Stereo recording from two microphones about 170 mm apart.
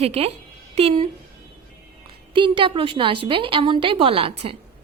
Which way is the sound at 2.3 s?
30° right (ahead or behind).